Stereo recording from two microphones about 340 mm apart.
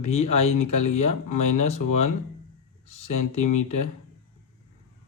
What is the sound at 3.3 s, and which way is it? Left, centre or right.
Speech, left.